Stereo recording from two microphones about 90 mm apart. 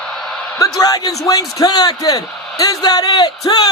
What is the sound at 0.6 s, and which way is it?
A man's voice, 45° left (ahead or behind).